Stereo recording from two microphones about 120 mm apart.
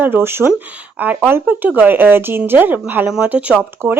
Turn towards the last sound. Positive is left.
turn(degrees=-15)  # may be behind; listen again after turning